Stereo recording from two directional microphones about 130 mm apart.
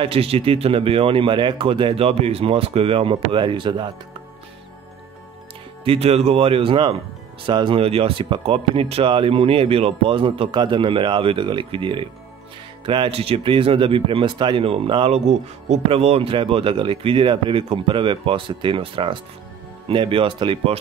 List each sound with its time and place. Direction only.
0.0 s speech: 45° right (ahead or behind)
5.9 s speech: 55° right (ahead or behind)